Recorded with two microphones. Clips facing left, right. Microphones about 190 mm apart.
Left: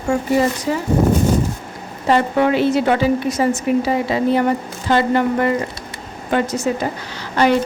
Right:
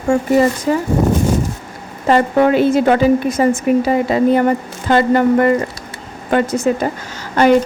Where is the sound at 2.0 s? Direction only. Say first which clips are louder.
Right 3 dB; 45° right (ahead or behind).